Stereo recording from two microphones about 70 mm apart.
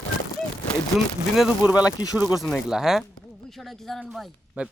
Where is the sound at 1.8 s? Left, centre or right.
Left.